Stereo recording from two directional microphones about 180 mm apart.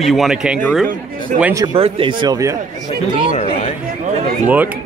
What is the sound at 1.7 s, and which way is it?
Speech, 30° right (ahead or behind).